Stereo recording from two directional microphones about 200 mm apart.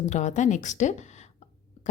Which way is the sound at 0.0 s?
35° left (ahead or behind).